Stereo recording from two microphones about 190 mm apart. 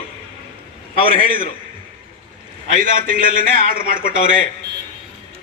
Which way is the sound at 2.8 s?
45° right (ahead or behind).